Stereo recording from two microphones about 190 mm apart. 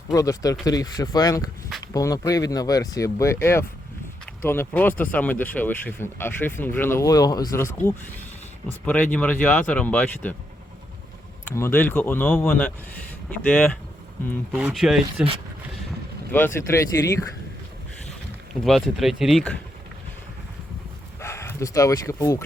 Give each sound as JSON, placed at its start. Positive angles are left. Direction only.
{"t": 0.1, "sound": "speech", "side_deg": 15}
{"t": 9.1, "sound": "speech", "side_deg": 10}
{"t": 11.5, "sound": "speech", "side_deg": 10}
{"t": 16.3, "sound": "speech", "side_deg": 10}
{"t": 18.6, "sound": "speech", "side_deg": 0}
{"t": 21.2, "sound": "speech", "side_deg": 15}